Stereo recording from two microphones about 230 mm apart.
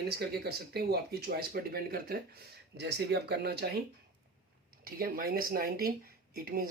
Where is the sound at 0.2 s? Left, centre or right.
Right.